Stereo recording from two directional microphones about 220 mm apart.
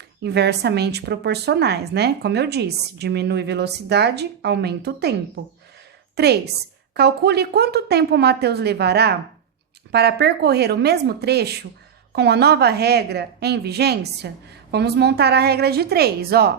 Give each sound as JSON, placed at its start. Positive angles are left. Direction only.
{"t": 0.2, "sound": "a woman's voice", "side_deg": -50}
{"t": 6.1, "sound": "a woman's voice", "side_deg": -45}